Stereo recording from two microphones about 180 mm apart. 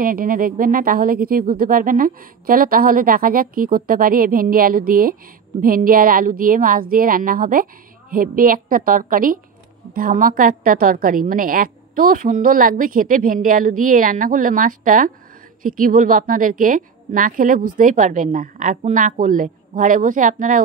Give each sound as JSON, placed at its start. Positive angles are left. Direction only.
{"t": 0.0, "sound": "a woman's voice", "side_deg": -50}